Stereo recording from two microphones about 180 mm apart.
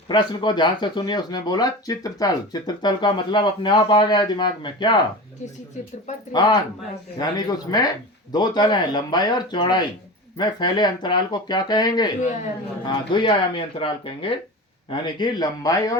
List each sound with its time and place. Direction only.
0.1 s speech: 25° left (ahead or behind)
6.3 s speech: 20° left (ahead or behind)